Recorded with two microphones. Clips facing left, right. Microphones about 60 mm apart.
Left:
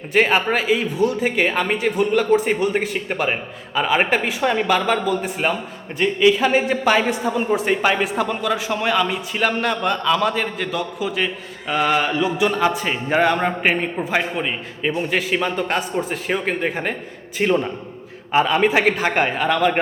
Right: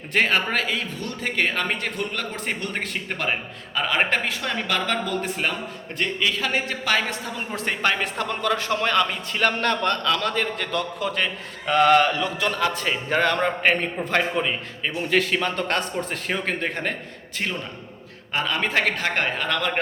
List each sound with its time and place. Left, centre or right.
0.1 s a man's voice: centre